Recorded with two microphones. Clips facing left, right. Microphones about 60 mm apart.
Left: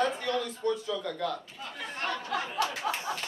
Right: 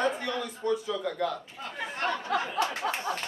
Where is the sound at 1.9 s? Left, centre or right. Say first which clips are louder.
Right 3 dB; right.